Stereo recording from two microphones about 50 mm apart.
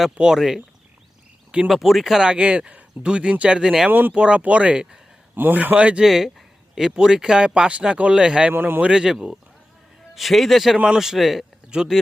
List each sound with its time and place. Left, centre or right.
0.2 s speech: centre
1.6 s speech: centre
2.3 s speech: right
3.6 s speech: centre
3.8 s speech: right
4.1 s speech: right
6.0 s speech: centre
8.5 s a man's voice: right
8.8 s speech: centre
10.2 s speech: centre
11.7 s speech: centre